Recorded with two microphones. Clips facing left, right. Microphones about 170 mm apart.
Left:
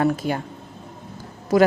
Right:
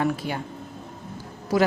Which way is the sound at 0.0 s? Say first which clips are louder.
Left 4 dB; 45° left (ahead or behind).